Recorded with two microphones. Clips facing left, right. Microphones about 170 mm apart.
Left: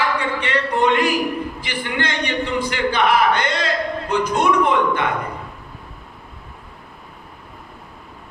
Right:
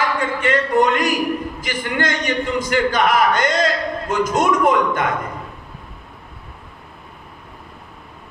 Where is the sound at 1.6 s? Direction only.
45° right (ahead or behind).